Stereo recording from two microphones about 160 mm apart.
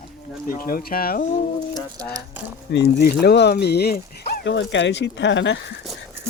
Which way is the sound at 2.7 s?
85° left.